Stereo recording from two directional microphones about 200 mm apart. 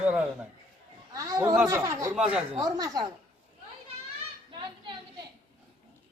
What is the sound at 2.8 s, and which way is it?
Speech, 20° right (ahead or behind).